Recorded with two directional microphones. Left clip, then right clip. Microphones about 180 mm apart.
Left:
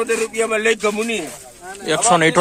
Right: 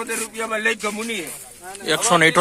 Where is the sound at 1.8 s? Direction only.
5° left (ahead or behind).